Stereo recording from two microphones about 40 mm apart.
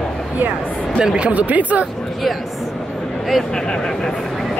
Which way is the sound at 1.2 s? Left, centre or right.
Right.